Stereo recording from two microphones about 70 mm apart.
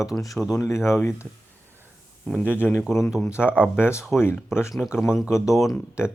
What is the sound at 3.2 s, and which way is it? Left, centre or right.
Speech, left.